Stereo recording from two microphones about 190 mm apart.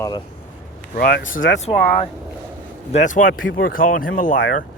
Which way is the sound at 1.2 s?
85° left.